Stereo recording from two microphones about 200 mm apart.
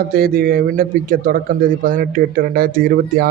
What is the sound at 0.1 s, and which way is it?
A man's voice, 45° right (ahead or behind).